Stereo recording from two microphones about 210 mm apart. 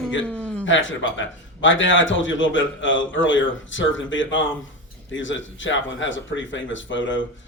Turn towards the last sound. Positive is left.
turn(degrees=65)  # may be behind; listen again after turning